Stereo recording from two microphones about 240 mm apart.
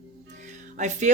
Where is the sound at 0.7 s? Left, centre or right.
Right.